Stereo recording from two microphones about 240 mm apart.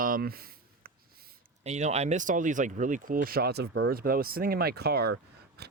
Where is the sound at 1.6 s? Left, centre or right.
Right.